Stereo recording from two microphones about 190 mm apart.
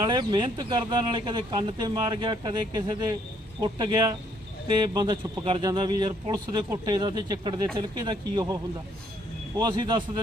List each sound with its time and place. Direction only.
0.0 s speech: 25° right (ahead or behind)
9.6 s speech: 25° right (ahead or behind)